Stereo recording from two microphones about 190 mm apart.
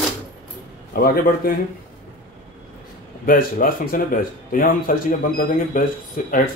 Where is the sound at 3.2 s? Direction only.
50° left (ahead or behind).